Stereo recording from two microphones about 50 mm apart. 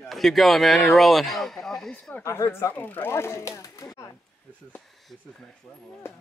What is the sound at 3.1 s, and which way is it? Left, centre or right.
Speech, left.